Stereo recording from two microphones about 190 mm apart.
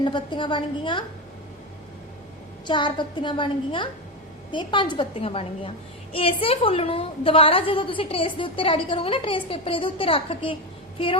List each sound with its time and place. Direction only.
0.0 s a woman's voice: 25° left (ahead or behind)
2.6 s a woman's voice: 25° left (ahead or behind)